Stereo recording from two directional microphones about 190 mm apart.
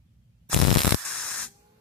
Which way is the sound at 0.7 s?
Centre (ahead or behind).